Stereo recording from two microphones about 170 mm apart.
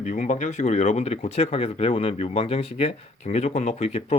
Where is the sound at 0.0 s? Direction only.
45° left (ahead or behind).